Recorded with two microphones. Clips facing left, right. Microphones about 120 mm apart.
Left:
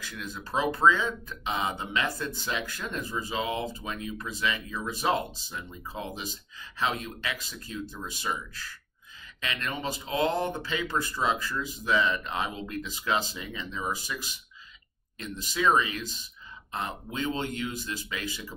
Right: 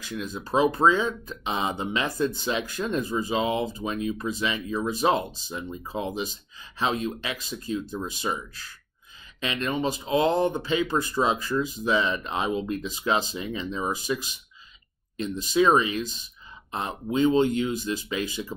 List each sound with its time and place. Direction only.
0.0 s speech: 20° right (ahead or behind)
9.4 s speech: 25° right (ahead or behind)